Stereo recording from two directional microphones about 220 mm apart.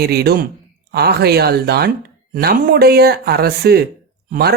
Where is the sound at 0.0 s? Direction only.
45° right (ahead or behind).